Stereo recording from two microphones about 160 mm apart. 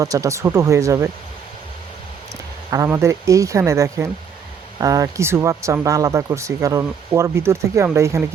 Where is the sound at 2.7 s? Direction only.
20° right (ahead or behind).